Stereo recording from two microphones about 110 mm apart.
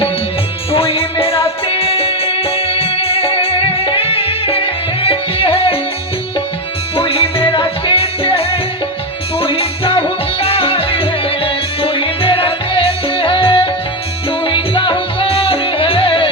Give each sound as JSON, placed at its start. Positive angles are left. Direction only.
{"t": 0.7, "sound": "music", "side_deg": 60}
{"t": 6.9, "sound": "music", "side_deg": 55}